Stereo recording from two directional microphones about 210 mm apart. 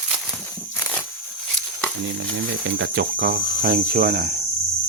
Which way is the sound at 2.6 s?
60° right (ahead or behind).